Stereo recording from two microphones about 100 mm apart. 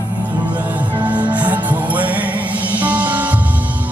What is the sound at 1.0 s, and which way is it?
Music, 15° right (ahead or behind).